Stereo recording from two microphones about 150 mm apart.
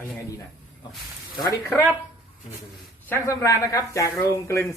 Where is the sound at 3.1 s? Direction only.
20° left (ahead or behind).